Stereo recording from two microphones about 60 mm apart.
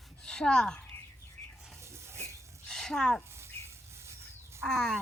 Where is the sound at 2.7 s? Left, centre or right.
Centre.